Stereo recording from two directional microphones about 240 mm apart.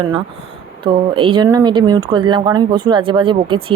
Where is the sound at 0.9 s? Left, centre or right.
Right.